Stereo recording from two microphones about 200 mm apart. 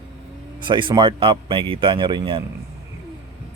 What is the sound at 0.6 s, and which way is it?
Speech, 25° right (ahead or behind).